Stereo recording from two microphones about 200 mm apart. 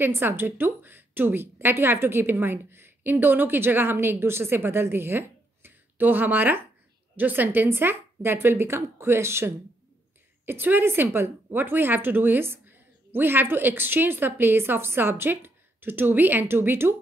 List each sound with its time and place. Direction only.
0.0 s a woman's voice: 10° right (ahead or behind)